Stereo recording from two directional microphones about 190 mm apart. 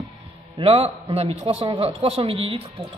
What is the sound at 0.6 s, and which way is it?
A man's voice, 30° right (ahead or behind).